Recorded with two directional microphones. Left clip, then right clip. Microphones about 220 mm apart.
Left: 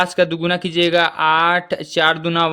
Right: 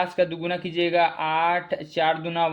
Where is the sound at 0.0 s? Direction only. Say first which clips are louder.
Left 7 dB; 45° left (ahead or behind).